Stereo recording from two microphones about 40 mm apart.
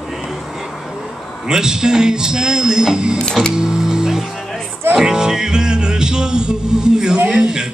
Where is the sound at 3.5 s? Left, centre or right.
Centre.